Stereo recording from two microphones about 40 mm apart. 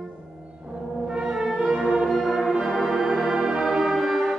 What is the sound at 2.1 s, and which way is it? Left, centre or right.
Music, centre.